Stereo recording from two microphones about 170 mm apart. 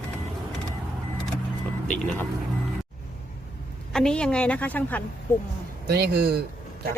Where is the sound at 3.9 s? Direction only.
5° left (ahead or behind).